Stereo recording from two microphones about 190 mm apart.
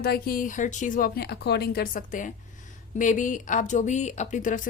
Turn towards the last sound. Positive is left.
turn(degrees=45)  # may be behind; listen again after turning